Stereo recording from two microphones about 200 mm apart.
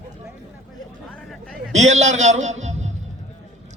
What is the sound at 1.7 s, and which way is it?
A man's voice, 35° right (ahead or behind).